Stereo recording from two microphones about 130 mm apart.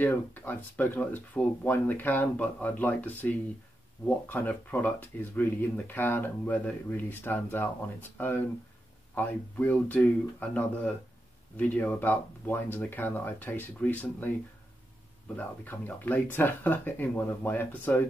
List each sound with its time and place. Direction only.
0.0 s speech: 15° left (ahead or behind)
15.3 s speech: 15° left (ahead or behind)